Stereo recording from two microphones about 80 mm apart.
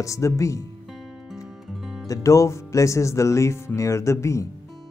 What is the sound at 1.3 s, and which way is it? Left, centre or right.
Music, centre.